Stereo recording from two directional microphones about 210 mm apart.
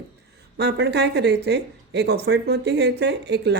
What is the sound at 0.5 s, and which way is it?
Speech, 50° right (ahead or behind).